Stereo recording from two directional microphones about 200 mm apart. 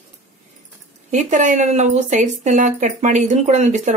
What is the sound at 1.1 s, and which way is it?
Speech, 40° right (ahead or behind).